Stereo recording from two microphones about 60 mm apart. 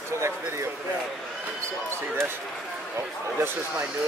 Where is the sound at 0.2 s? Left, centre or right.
Right.